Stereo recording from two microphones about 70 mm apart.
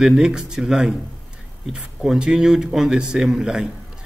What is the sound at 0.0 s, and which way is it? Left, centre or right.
A man's voice, centre.